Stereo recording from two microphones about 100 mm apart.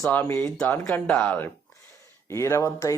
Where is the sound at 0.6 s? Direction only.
20° left (ahead or behind).